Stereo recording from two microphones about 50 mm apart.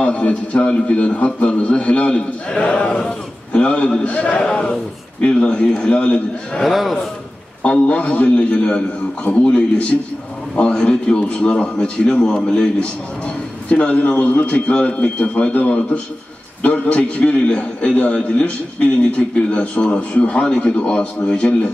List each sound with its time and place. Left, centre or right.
0.0 s a man's voice: left
6.6 s a man's voice: centre
7.6 s a man's voice: left
13.7 s a man's voice: left